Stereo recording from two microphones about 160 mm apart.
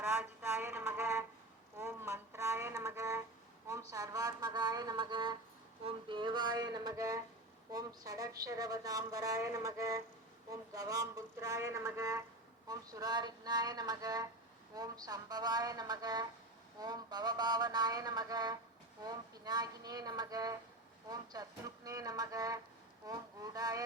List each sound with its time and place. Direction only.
0.2 s a woman's voice: 15° right (ahead or behind)